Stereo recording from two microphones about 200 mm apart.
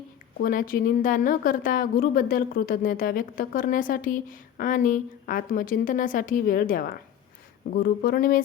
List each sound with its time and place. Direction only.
0.4 s a woman's voice: 45° left (ahead or behind)